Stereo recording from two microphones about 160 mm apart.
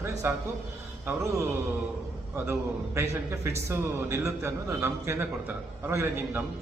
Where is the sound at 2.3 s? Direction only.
15° right (ahead or behind).